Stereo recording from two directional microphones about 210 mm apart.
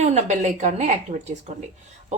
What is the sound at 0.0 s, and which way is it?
A woman's voice, 35° right (ahead or behind).